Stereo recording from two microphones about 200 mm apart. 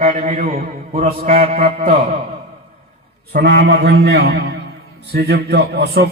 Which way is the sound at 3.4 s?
55° right (ahead or behind).